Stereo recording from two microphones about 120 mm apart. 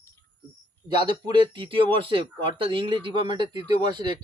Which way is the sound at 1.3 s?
45° right (ahead or behind).